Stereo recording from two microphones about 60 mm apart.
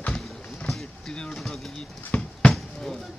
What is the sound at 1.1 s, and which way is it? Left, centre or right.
Speech, centre.